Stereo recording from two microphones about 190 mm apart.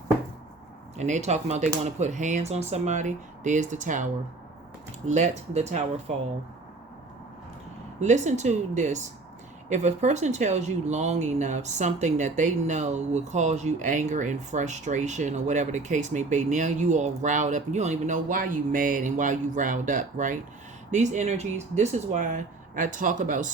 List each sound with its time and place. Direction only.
0.9 s speech: 40° right (ahead or behind)
8.0 s speech: 40° right (ahead or behind)